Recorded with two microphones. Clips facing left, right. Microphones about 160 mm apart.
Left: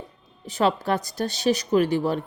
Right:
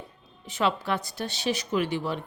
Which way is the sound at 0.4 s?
40° left (ahead or behind).